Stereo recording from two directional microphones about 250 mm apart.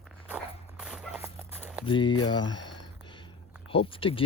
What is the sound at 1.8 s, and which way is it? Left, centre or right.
Speech, centre.